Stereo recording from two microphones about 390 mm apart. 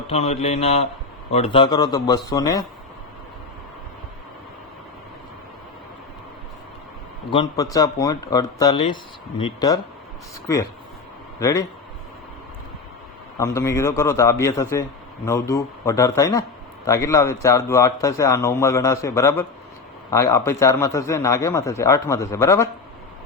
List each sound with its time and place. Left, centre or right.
0.1 s a man's voice: centre
7.3 s a man's voice: centre
11.3 s speech: centre
13.4 s a man's voice: centre